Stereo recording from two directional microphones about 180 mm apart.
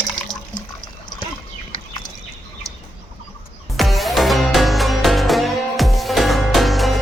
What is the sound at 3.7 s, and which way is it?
Music, centre (ahead or behind).